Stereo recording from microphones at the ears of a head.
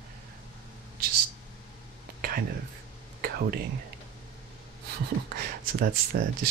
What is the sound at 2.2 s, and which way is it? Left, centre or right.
Speech, right.